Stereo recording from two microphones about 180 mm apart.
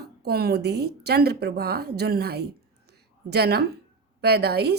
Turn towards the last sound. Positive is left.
turn(degrees=-65)  # may be behind; listen again after turning